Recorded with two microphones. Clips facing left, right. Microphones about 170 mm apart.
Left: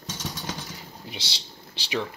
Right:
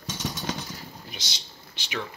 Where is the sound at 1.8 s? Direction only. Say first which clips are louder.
Left 2 dB; 35° left (ahead or behind).